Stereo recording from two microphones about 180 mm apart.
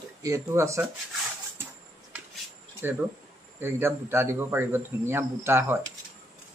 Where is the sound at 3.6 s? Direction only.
10° right (ahead or behind).